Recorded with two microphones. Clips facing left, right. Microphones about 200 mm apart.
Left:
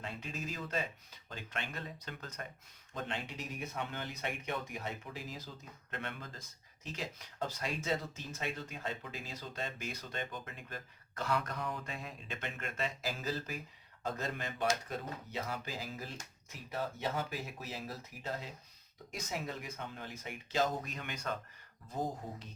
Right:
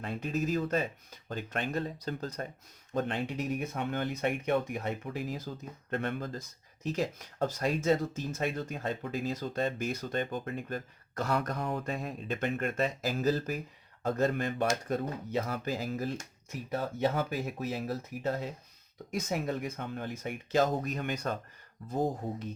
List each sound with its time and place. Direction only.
0.0 s speech: 50° right (ahead or behind)
2.9 s speech: 50° right (ahead or behind)
5.9 s speech: 45° right (ahead or behind)